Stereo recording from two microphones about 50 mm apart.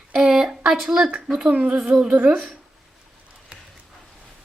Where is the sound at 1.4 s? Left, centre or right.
Right.